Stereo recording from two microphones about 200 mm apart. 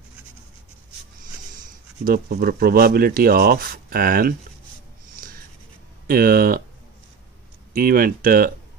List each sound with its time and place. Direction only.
2.0 s speech: 45° right (ahead or behind)
6.0 s speech: 45° right (ahead or behind)
7.7 s speech: 45° right (ahead or behind)